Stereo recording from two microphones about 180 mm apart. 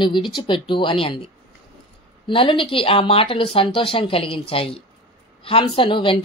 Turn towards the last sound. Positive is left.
turn(degrees=30)  # may be behind; listen again after turning